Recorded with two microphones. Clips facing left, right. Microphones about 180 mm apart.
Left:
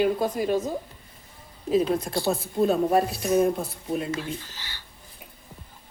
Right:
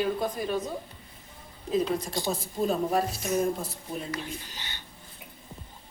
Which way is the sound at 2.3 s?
65° left (ahead or behind).